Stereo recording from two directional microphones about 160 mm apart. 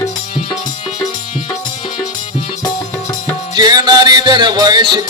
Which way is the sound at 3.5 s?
25° right (ahead or behind).